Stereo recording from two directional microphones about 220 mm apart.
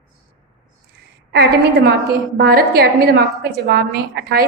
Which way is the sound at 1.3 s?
45° right (ahead or behind).